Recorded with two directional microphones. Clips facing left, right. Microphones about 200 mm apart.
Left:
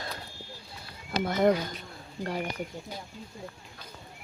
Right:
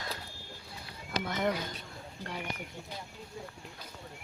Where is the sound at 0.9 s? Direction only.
35° left (ahead or behind).